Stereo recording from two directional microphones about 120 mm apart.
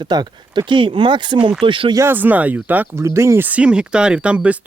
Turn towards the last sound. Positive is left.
turn(degrees=-10)  # may be behind; listen again after turning